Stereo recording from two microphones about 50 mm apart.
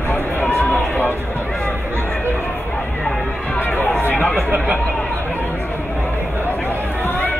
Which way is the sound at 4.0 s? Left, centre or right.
Left.